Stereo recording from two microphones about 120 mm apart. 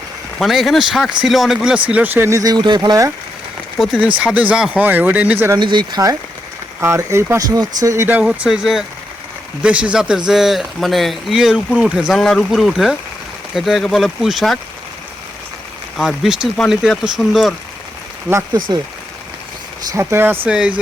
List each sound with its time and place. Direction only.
0.3 s speech: centre (ahead or behind); by 3.1 s 35° right (ahead or behind)
3.8 s speech: centre (ahead or behind)
5.5 s speech: 40° right (ahead or behind)
6.7 s speech: 20° right (ahead or behind)
8.0 s speech: 10° right (ahead or behind)
16.0 s speech: 5° right (ahead or behind)
19.9 s speech: 20° right (ahead or behind)